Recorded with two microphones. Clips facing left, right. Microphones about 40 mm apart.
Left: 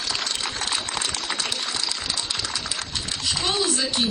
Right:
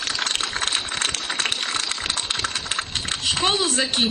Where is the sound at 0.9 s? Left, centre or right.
Right.